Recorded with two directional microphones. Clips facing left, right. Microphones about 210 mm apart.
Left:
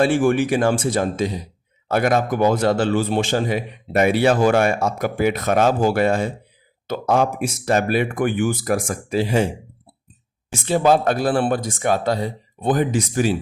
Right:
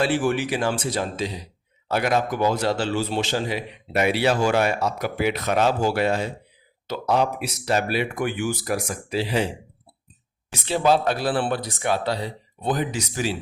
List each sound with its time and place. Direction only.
0.0 s a man's voice: 50° left (ahead or behind)
10.5 s a man's voice: 50° left (ahead or behind)